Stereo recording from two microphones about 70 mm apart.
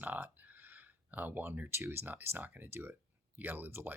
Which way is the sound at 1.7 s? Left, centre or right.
Right.